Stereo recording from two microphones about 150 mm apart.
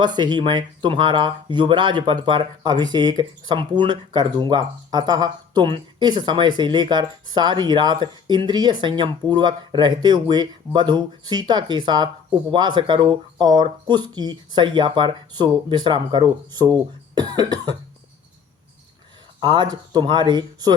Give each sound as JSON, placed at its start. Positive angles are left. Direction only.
{"t": 0.0, "sound": "speech", "side_deg": -30}
{"t": 19.4, "sound": "speech", "side_deg": -30}